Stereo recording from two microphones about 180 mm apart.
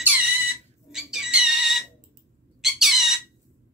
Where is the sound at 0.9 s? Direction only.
Centre (ahead or behind).